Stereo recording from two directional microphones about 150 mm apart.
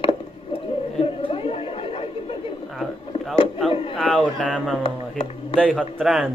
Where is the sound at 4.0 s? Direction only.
Centre (ahead or behind).